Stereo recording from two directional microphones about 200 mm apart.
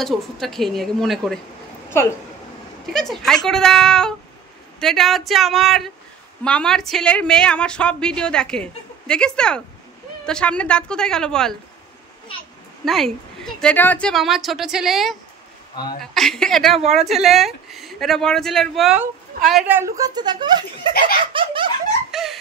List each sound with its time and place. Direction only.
0.0 s a woman's voice: centre (ahead or behind)
2.9 s a woman's voice: centre (ahead or behind)
12.8 s a woman's voice: centre (ahead or behind)
19.8 s speech: 20° right (ahead or behind)
22.1 s a sound: centre (ahead or behind)